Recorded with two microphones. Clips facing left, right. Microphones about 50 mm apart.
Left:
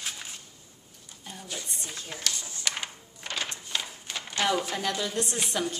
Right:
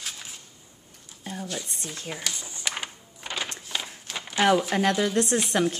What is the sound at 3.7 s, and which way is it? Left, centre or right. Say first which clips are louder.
Run: right 1 dB; centre.